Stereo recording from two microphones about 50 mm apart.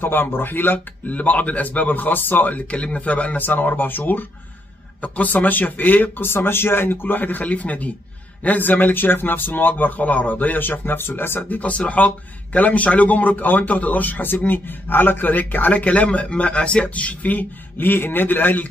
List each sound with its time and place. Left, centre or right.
0.0 s a man's voice: left